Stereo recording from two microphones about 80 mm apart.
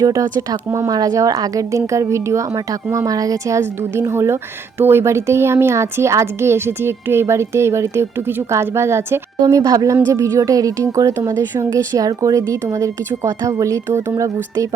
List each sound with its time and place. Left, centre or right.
0.1 s a woman's voice: right
9.4 s a woman's voice: right